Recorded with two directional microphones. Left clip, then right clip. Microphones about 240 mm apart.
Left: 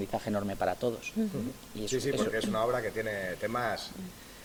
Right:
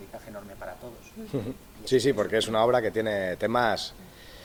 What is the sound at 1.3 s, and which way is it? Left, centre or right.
A man's voice, right.